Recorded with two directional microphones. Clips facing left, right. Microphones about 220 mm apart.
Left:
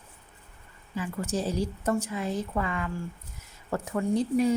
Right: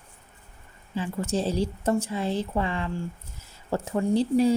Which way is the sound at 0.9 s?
25° right (ahead or behind).